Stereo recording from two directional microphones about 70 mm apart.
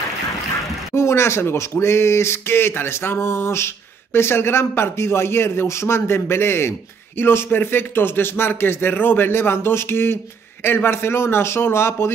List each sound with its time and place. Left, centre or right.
0.9 s speech: left